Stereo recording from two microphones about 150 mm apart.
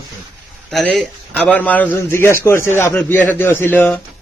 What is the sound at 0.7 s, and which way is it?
A man's voice, 5° left (ahead or behind).